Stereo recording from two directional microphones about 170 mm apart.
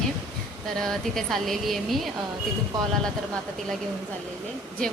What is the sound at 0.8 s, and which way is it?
Speech, centre (ahead or behind).